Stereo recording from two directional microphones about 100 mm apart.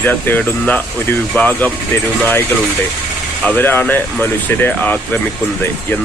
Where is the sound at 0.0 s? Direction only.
20° left (ahead or behind).